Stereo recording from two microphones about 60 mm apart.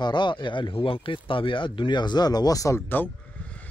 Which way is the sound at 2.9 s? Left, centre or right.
Left.